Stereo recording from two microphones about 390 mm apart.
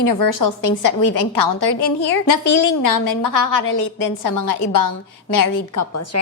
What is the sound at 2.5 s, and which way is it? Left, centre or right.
A woman's voice, left.